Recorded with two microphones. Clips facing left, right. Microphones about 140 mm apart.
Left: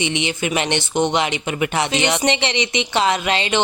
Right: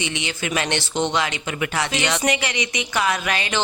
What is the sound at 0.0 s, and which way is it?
Speech, 20° left (ahead or behind).